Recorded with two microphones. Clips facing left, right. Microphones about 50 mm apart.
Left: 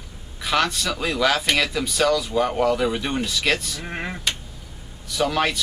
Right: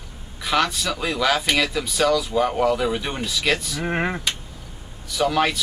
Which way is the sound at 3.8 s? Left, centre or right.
Right.